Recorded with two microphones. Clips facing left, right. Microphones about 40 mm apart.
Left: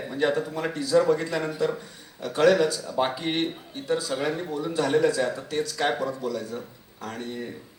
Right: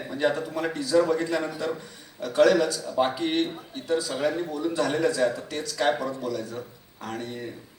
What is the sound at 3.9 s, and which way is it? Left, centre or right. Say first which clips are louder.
A man's voice: right 1 dB; left.